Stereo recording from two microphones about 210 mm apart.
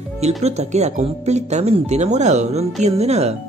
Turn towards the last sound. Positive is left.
turn(degrees=-30)  # may be behind; listen again after turning